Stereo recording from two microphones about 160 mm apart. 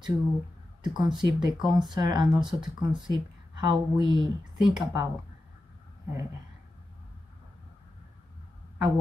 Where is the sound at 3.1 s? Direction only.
25° right (ahead or behind).